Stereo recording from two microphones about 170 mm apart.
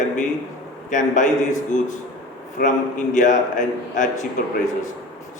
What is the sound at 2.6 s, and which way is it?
A man's voice, 50° left (ahead or behind).